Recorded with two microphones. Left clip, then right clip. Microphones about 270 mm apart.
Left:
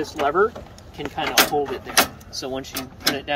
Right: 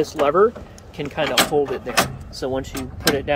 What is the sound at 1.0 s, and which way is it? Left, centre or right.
Speech, right.